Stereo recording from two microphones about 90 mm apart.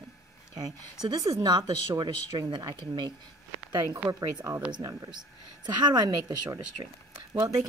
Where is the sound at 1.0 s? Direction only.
50° right (ahead or behind).